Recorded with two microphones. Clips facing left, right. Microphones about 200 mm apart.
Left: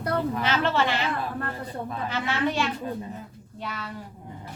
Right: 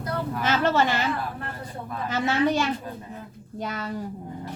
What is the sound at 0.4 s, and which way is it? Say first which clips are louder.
Speech: right 6 dB; 45° right (ahead or behind).